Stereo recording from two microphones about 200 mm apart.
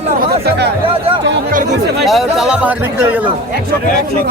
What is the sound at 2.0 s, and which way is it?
Speech, centre (ahead or behind).